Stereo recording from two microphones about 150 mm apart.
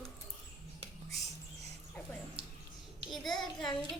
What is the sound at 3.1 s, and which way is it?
Child singing, centre (ahead or behind).